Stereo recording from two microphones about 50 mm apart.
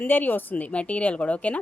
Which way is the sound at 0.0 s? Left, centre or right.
Left.